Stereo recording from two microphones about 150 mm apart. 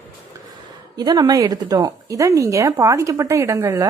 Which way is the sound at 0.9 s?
25° right (ahead or behind).